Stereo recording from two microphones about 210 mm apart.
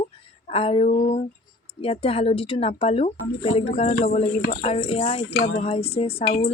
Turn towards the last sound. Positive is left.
turn(degrees=30)  # may be behind; listen again after turning